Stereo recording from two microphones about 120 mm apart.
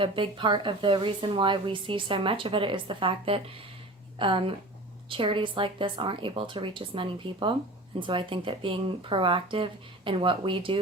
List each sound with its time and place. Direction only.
0.0 s speech: 45° right (ahead or behind)